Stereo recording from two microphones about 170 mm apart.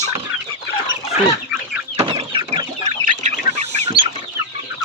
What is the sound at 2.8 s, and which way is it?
Chicken, 40° right (ahead or behind).